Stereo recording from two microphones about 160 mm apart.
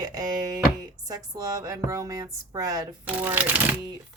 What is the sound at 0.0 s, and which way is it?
Speech, 25° right (ahead or behind).